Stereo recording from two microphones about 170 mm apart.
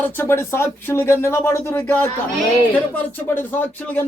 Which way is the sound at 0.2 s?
15° left (ahead or behind).